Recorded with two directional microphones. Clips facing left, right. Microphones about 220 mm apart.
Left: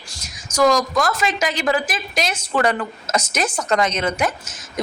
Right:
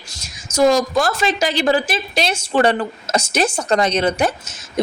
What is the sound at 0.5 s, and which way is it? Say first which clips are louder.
Speech: right 2 dB; 25° right (ahead or behind).